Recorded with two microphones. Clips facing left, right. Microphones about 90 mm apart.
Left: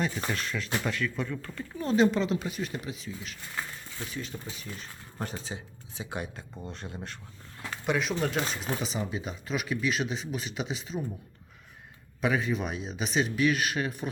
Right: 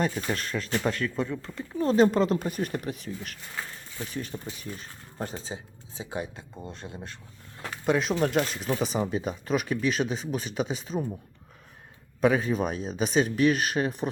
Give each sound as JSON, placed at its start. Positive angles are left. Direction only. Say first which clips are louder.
{"t": 0.3, "sound": "speech", "louder": "right 2 dB", "side_deg": -40}
{"t": 1.9, "sound": "speech", "louder": "right 3 dB", "side_deg": -40}
{"t": 5.2, "sound": "speech", "louder": "right 2 dB", "side_deg": -25}
{"t": 7.6, "sound": "speech", "louder": "right 4 dB", "side_deg": -35}
{"t": 8.3, "sound": "speech", "louder": "right 4 dB", "side_deg": -50}
{"t": 12.2, "sound": "speech", "louder": "right 5 dB", "side_deg": -40}